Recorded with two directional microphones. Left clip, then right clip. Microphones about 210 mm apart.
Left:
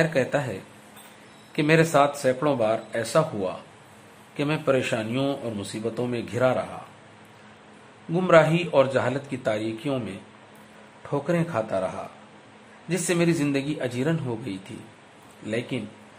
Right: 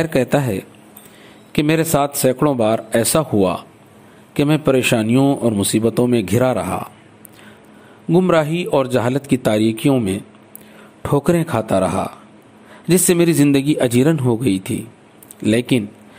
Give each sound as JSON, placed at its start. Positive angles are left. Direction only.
{"t": 0.0, "sound": "a man's voice", "side_deg": -35}
{"t": 8.3, "sound": "a man's voice", "side_deg": -40}
{"t": 11.0, "sound": "a man's voice", "side_deg": -40}